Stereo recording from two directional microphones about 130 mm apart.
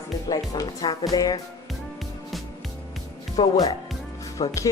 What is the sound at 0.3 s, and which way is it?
Speech, 30° left (ahead or behind).